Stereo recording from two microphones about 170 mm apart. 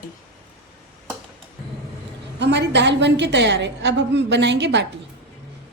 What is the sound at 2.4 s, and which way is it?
A woman's voice, 90° right.